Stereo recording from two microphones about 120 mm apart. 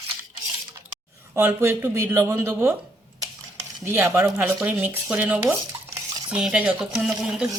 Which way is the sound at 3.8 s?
20° right (ahead or behind).